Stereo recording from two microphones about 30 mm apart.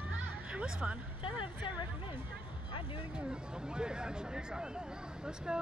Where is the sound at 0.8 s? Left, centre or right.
Right.